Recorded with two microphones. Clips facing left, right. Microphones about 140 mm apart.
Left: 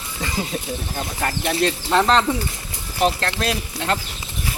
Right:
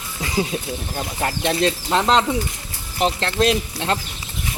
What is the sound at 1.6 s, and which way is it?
Speech, 20° right (ahead or behind).